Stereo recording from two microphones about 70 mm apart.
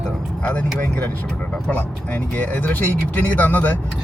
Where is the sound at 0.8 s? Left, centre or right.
Left.